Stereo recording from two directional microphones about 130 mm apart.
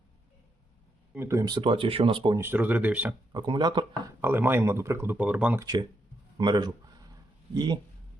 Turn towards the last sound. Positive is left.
turn(degrees=-35)  # may be behind; listen again after turning